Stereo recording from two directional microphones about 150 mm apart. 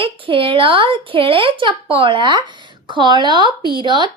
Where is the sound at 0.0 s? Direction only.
35° right (ahead or behind).